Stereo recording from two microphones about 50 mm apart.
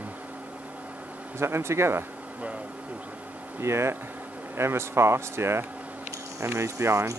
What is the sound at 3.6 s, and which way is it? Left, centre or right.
Speech, right.